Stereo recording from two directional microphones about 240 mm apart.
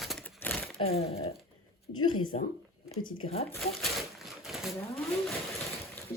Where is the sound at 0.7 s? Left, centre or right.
Left.